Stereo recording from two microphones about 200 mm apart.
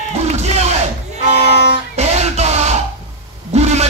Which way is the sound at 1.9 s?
35° right (ahead or behind).